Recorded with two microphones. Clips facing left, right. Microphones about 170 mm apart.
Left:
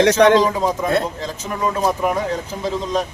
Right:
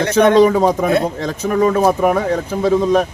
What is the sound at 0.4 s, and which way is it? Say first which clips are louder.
Speech: right 6 dB; 65° right (ahead or behind).